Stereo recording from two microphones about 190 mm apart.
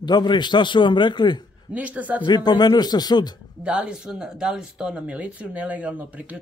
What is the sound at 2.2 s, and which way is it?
A man's voice, 25° left (ahead or behind).